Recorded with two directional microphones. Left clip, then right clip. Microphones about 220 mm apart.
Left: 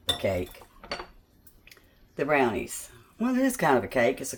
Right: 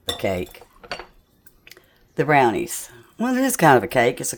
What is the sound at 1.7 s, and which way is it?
Speech, 55° right (ahead or behind).